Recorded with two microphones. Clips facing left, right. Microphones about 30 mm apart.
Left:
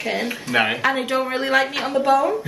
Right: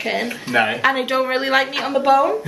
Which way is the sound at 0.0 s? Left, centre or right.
Centre.